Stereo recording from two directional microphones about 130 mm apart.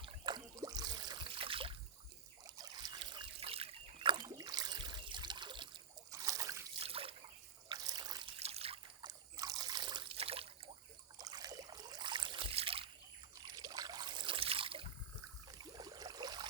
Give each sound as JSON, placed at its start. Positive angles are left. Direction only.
{"t": 0.0, "sound": "trickle", "side_deg": -35}
{"t": 2.6, "sound": "trickle", "side_deg": -30}
{"t": 6.1, "sound": "a sound", "side_deg": -25}
{"t": 6.7, "sound": "water", "side_deg": -45}
{"t": 7.7, "sound": "water", "side_deg": -30}
{"t": 8.4, "sound": "trickle", "side_deg": -50}
{"t": 9.0, "sound": "trickle", "side_deg": -30}
{"t": 11.2, "sound": "a sound", "side_deg": -30}
{"t": 13.5, "sound": "trickle", "side_deg": -30}
{"t": 15.5, "sound": "a sound", "side_deg": -30}